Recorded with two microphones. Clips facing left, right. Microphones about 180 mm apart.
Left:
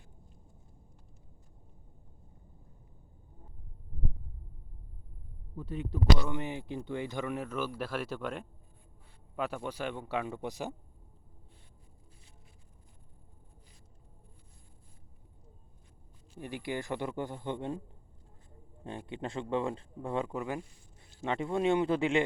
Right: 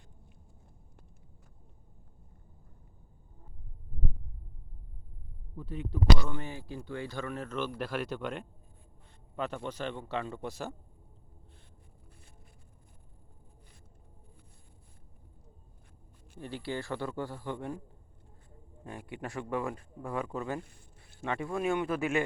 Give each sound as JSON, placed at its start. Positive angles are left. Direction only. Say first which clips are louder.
{"t": 6.2, "sound": "speech", "louder": "left 3 dB", "side_deg": 20}
{"t": 16.4, "sound": "speech", "louder": "even", "side_deg": 15}